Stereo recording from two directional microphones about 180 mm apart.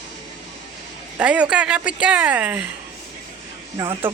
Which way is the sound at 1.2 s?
5° right (ahead or behind).